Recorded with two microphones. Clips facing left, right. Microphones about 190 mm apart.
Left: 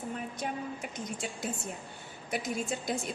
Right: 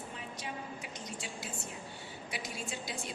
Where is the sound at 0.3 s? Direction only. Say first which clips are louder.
Left 6 dB; 50° left (ahead or behind).